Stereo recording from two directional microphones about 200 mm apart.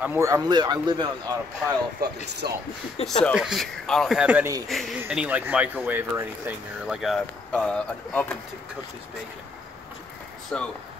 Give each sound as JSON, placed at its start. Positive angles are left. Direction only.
{"t": 0.0, "sound": "speech", "side_deg": -10}
{"t": 2.4, "sound": "speech", "side_deg": -50}
{"t": 3.2, "sound": "speech", "side_deg": 0}
{"t": 4.6, "sound": "speech", "side_deg": 0}
{"t": 10.5, "sound": "speech", "side_deg": 5}